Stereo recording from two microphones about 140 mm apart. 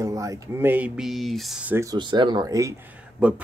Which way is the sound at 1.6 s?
15° right (ahead or behind).